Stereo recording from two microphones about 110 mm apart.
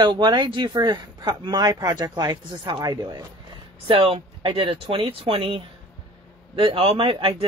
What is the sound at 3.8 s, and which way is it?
A man's voice, 55° right (ahead or behind).